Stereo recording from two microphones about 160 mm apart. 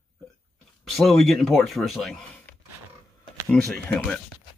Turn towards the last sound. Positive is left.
turn(degrees=5)  # may be behind; listen again after turning